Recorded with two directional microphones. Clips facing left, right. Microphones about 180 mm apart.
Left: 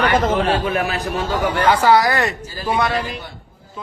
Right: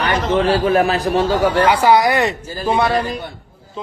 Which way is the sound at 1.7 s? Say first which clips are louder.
Left 2 dB; 15° right (ahead or behind).